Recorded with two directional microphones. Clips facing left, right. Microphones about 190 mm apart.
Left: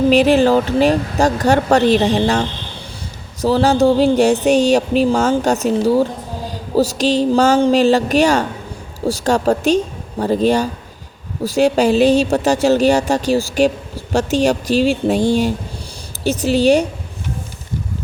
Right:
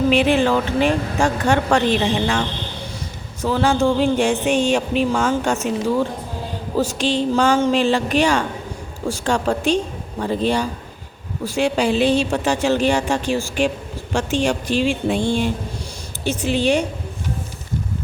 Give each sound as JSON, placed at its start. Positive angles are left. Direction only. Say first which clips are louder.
{"t": 0.1, "sound": "speech", "louder": "left 6 dB", "side_deg": 40}
{"t": 3.4, "sound": "speech", "louder": "left 5 dB", "side_deg": 40}